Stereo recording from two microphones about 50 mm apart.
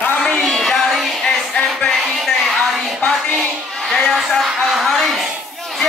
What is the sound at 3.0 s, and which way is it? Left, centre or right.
Music, left.